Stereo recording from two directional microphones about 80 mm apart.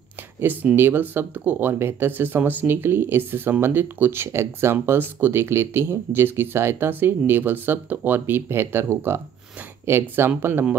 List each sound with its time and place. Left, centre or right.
0.4 s speech: right